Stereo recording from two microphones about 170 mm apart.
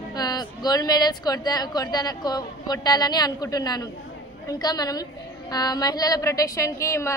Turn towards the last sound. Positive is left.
turn(degrees=15)  # may be behind; listen again after turning